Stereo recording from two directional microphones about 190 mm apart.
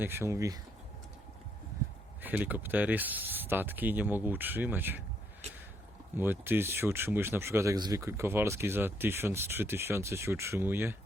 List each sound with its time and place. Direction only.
0.0 s speech: 10° right (ahead or behind)
2.2 s speech: 10° right (ahead or behind)
6.1 s speech: 10° right (ahead or behind)